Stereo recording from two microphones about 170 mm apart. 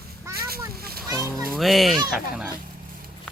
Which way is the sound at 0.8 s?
60° right (ahead or behind).